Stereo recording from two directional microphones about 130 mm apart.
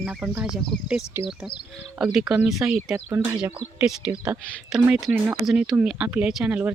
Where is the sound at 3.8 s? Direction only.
10° right (ahead or behind).